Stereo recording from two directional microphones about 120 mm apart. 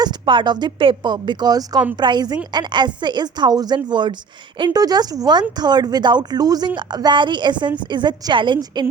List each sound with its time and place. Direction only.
0.0 s a woman's voice: 40° right (ahead or behind)